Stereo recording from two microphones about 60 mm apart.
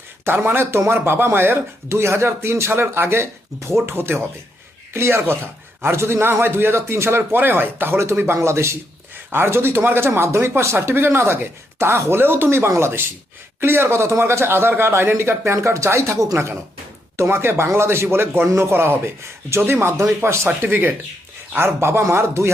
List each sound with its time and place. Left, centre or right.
0.3 s speech: right
7.2 s speech: right
8.4 s speech: right
20.5 s speech: right
21.6 s speech: right